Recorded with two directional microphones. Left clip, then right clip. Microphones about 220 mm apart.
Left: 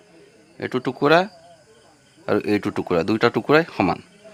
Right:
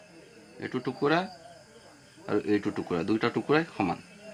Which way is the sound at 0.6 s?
45° left (ahead or behind).